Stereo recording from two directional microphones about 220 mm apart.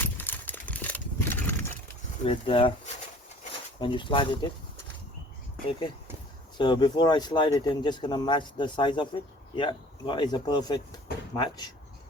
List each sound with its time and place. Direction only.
0.0 s a sound: 10° left (ahead or behind)
2.2 s speech: 25° left (ahead or behind)
6.6 s speech: 20° left (ahead or behind)